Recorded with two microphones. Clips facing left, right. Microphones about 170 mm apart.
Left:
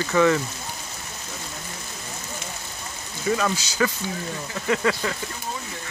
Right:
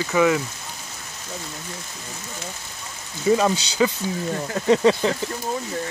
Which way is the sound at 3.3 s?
25° right (ahead or behind).